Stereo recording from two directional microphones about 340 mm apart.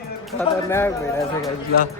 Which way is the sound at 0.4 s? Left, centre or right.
Centre.